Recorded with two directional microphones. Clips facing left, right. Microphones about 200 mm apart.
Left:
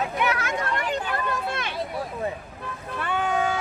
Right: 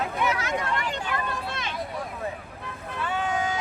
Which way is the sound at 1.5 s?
55° left (ahead or behind).